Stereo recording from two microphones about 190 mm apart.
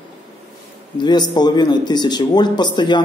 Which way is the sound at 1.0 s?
20° left (ahead or behind).